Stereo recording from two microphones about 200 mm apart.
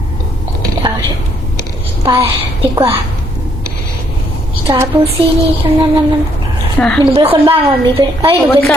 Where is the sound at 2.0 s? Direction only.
25° right (ahead or behind).